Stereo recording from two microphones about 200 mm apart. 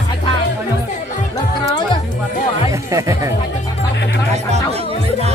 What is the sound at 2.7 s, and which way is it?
Speech, 15° right (ahead or behind).